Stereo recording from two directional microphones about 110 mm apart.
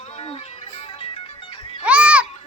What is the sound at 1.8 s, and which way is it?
Children playing, 10° right (ahead or behind).